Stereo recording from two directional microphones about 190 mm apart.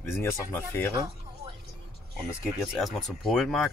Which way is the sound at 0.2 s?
10° left (ahead or behind).